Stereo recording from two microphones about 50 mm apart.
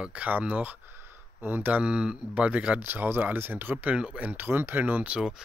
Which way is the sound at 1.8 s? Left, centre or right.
Centre.